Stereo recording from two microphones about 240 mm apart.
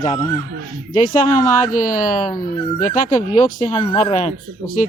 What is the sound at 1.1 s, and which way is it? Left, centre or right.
Speech, left.